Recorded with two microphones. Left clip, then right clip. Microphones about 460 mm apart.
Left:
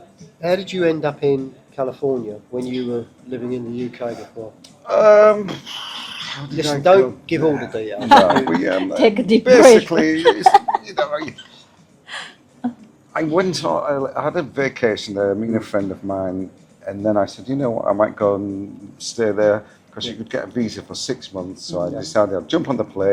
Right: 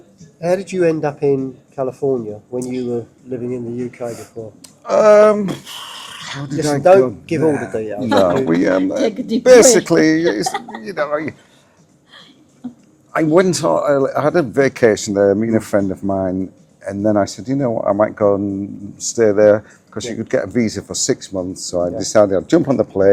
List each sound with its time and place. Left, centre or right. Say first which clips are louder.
0.3 s speech: right 2 dB; right
4.9 s speech: right 1 dB; right
8.4 s speech: right 4 dB; right
9.0 s speech: left 5 dB; centre
9.4 s speech: right 4 dB; right
9.7 s speech: right 1 dB; right
13.1 s speech: right 5 dB; right
18.9 s speech: right 6 dB; right